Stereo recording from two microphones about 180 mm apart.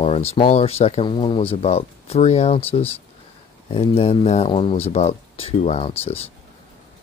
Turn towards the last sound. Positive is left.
turn(degrees=35)  # may be behind; listen again after turning